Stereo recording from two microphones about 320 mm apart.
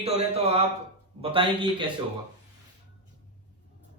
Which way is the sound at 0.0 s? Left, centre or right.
Centre.